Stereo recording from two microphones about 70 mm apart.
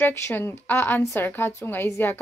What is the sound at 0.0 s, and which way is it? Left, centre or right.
A woman's voice, left.